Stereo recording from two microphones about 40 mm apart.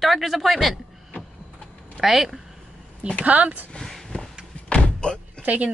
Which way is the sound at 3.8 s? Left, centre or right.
Centre.